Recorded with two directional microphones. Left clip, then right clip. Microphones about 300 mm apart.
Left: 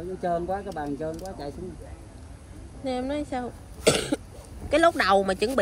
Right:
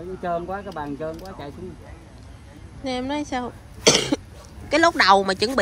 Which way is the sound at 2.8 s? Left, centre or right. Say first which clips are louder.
Right 2 dB; centre.